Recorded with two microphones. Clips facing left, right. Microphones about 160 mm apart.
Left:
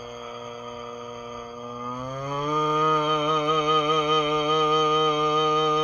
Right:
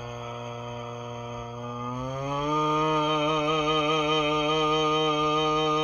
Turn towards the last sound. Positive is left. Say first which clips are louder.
# left 2 dB
turn(degrees=-20)  # may be behind; listen again after turning